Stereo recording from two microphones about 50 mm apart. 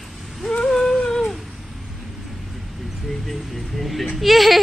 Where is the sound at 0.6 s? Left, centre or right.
Centre.